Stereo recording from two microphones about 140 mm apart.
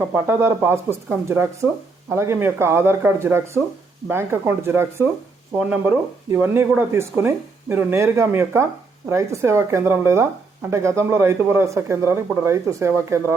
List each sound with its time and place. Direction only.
0.0 s speech: 15° right (ahead or behind)